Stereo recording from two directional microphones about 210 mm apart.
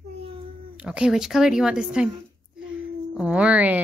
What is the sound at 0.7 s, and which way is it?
A woman's voice, 5° right (ahead or behind).